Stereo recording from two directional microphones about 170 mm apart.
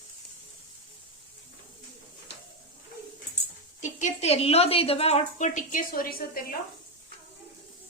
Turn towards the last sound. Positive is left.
turn(degrees=60)  # may be behind; listen again after turning